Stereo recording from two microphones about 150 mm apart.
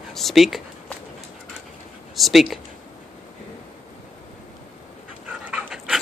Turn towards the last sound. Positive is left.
turn(degrees=-5)  # may be behind; listen again after turning